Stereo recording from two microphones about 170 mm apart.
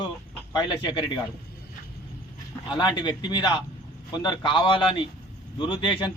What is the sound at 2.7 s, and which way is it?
Speech, 25° left (ahead or behind).